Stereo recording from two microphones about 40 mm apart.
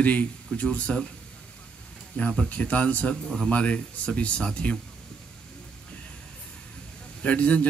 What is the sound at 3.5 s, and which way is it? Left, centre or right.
Speech, left.